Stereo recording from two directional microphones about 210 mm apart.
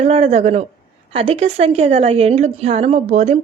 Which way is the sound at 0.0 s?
30° right (ahead or behind).